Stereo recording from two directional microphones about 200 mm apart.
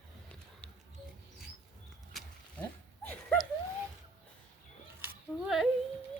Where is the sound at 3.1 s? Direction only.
5° left (ahead or behind).